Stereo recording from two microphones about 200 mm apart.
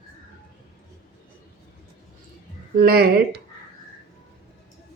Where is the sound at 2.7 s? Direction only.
50° right (ahead or behind).